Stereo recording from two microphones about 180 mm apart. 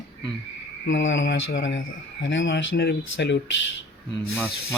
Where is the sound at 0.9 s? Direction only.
85° left.